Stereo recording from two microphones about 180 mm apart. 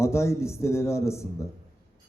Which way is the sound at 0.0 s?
15° left (ahead or behind).